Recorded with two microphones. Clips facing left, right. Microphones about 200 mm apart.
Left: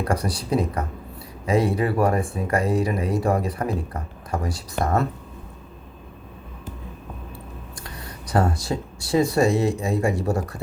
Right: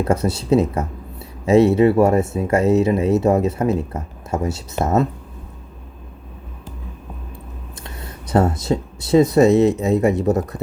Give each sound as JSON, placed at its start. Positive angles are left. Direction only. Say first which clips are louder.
{"t": 0.0, "sound": "speech", "louder": "right 6 dB", "side_deg": -25}
{"t": 7.9, "sound": "speech", "louder": "right 5 dB", "side_deg": -25}